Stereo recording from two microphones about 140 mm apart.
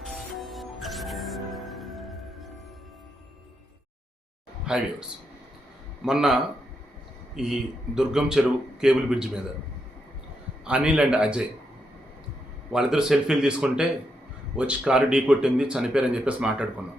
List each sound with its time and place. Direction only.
0.0 s music: centre (ahead or behind)
4.6 s speech: 5° right (ahead or behind)
6.1 s speech: 5° right (ahead or behind)
10.6 s speech: 5° right (ahead or behind)
12.7 s speech: 5° right (ahead or behind)